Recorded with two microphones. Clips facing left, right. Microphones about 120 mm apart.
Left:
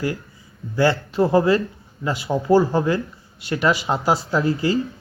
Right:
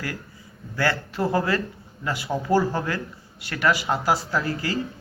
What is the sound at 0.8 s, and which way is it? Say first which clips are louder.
Speech: left 6 dB; 20° left (ahead or behind).